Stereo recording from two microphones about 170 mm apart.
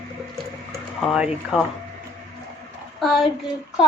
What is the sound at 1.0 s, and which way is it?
Speech, 5° right (ahead or behind).